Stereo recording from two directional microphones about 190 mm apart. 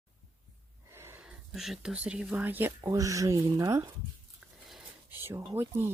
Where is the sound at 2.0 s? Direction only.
5° right (ahead or behind).